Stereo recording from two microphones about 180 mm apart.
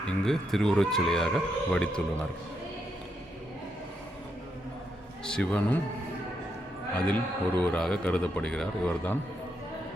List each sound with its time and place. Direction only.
0.0 s speech: 5° left (ahead or behind)
5.2 s speech: 5° left (ahead or behind)
7.1 s a man's voice: 10° left (ahead or behind)